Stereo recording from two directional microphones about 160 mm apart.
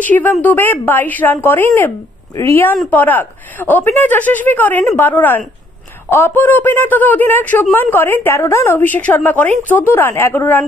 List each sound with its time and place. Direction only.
0.0 s speech: 10° left (ahead or behind)